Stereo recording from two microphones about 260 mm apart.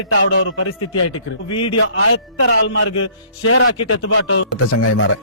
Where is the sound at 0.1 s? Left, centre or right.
Left.